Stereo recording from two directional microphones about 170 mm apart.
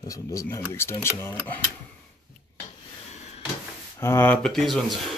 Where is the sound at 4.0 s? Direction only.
15° left (ahead or behind).